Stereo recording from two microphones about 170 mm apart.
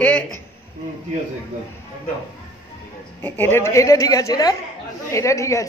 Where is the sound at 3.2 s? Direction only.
10° left (ahead or behind).